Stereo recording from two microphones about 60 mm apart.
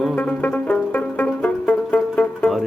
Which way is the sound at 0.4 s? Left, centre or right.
Left.